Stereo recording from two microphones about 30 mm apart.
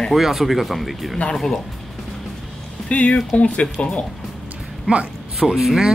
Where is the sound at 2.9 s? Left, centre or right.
Left.